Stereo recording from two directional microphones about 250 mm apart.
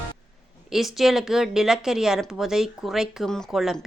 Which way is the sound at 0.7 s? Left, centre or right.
Centre.